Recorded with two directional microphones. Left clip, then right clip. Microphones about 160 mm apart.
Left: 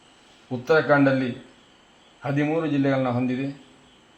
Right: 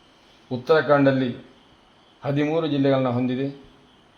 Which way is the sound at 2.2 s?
70° right (ahead or behind).